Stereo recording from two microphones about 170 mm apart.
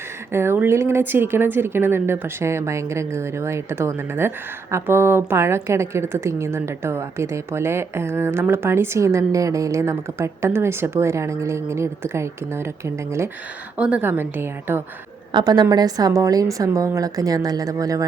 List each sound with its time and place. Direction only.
0.3 s a woman's voice: 15° right (ahead or behind)
15.3 s a woman's voice: 25° right (ahead or behind)